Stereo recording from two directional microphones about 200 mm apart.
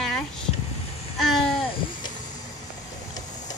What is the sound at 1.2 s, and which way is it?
Babbling, centre (ahead or behind).